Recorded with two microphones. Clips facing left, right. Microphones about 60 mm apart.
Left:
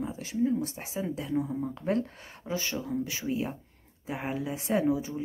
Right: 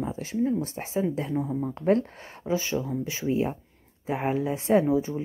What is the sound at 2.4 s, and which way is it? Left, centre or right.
Speech, right.